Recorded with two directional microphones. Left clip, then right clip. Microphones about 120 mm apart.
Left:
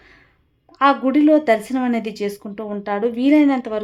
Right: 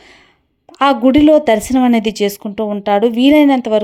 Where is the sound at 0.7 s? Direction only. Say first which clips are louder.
Right 5 dB; 55° right (ahead or behind).